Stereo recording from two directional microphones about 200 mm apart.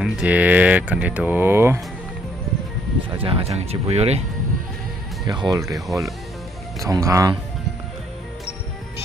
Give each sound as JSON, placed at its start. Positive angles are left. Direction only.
{"t": 0.0, "sound": "speech", "side_deg": -5}
{"t": 3.1, "sound": "speech", "side_deg": -25}
{"t": 5.2, "sound": "speech", "side_deg": -20}
{"t": 5.9, "sound": "speech", "side_deg": 0}
{"t": 6.8, "sound": "speech", "side_deg": -15}